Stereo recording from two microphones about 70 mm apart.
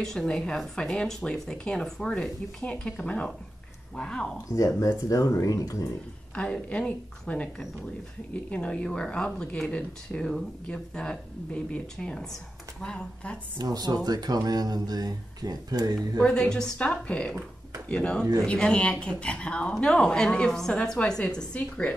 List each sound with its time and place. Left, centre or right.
0.0 s speech: centre
4.5 s speech: left
6.3 s speech: centre
13.6 s speech: right
16.3 s speech: centre
21.5 s speech: left